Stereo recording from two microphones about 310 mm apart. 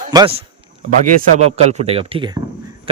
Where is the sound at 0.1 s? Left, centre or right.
Centre.